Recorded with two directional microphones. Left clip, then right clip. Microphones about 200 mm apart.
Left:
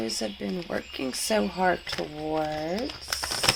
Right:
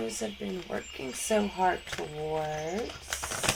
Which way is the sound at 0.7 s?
45° left (ahead or behind).